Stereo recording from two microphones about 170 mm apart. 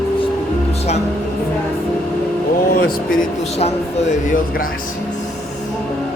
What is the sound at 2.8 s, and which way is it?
Speech, 55° left (ahead or behind).